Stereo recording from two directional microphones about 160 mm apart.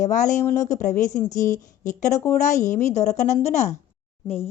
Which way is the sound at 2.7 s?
45° left (ahead or behind).